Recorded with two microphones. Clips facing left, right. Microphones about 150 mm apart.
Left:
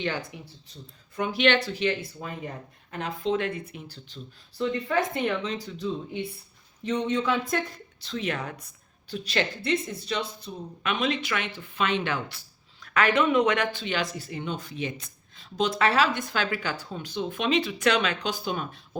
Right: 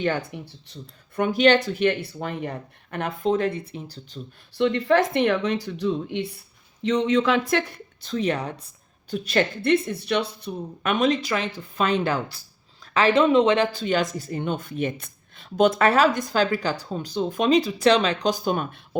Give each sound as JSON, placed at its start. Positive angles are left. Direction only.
{"t": 0.0, "sound": "speech", "side_deg": -55}
{"t": 3.3, "sound": "speech", "side_deg": -35}
{"t": 4.5, "sound": "speech", "side_deg": -75}
{"t": 6.8, "sound": "speech", "side_deg": -90}
{"t": 8.0, "sound": "speech", "side_deg": -40}
{"t": 9.0, "sound": "speech", "side_deg": -45}
{"t": 13.7, "sound": "speech", "side_deg": -45}